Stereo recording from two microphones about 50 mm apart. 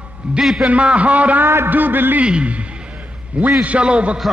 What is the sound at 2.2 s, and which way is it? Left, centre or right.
A man's voice, right.